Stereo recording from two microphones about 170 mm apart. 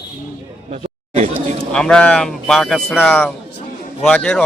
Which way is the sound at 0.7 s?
40° right (ahead or behind).